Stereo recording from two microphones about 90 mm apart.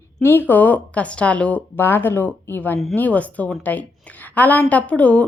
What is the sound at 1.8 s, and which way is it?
A woman's voice, 25° left (ahead or behind).